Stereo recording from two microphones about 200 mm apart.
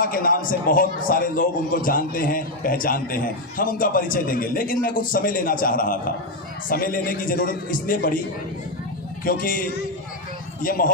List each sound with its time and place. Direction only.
0.0 s a man's voice: 45° left (ahead or behind)
9.2 s a man's voice: 45° left (ahead or behind)